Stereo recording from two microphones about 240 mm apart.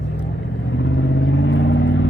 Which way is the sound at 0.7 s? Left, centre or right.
Left.